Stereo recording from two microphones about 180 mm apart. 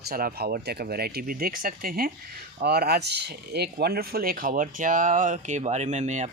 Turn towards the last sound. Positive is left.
turn(degrees=-40)  # may be behind; listen again after turning